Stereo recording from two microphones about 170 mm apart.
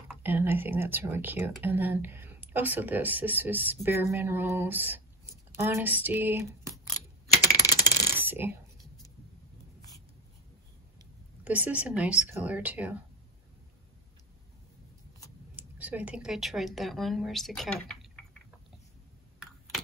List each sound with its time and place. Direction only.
0.2 s speech: 10° right (ahead or behind)
7.5 s coin: 20° left (ahead or behind)
8.2 s coin: 10° right (ahead or behind)
11.4 s speech: 10° right (ahead or behind)
15.5 s a woman's voice: 10° right (ahead or behind)